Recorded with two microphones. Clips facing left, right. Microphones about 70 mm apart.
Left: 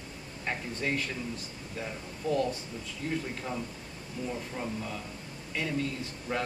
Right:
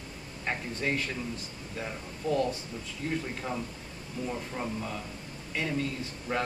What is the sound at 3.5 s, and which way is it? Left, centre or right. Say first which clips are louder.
A man's voice: right 1 dB; centre.